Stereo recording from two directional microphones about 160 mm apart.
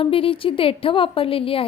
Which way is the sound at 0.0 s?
35° left (ahead or behind).